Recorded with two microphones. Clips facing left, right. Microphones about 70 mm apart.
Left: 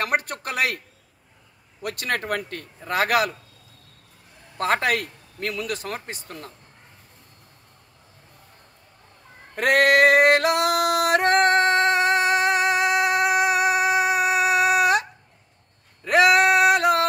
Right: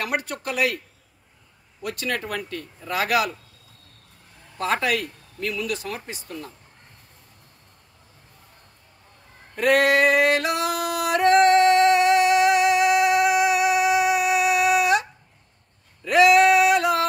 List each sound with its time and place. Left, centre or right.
0.0 s speech: left
1.8 s speech: left
4.6 s speech: left
9.6 s yodeling: left
16.0 s male singing: left